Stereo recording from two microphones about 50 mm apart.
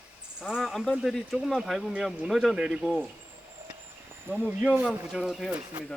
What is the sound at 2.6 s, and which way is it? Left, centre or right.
Speech, centre.